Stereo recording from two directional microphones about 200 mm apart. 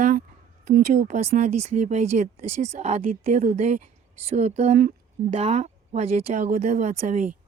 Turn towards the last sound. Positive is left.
turn(degrees=-35)  # may be behind; listen again after turning